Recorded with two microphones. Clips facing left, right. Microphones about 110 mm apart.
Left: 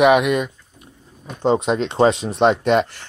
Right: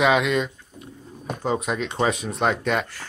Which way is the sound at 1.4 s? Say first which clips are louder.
Left 7 dB; 25° left (ahead or behind).